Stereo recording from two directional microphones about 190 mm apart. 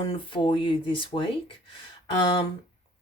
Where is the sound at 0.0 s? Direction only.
25° left (ahead or behind).